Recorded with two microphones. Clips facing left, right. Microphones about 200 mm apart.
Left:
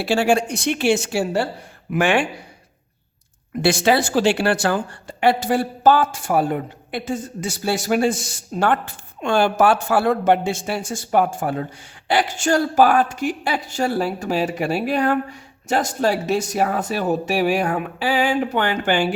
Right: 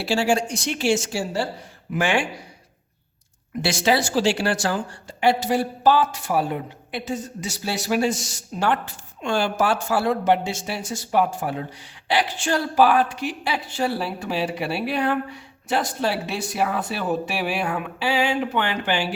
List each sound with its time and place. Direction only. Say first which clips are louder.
0.0 s speech: left 3 dB; 55° left (ahead or behind)
3.6 s speech: left 4 dB; 55° left (ahead or behind)